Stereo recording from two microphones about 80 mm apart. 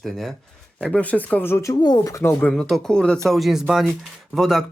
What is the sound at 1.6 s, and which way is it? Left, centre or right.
Speech, left.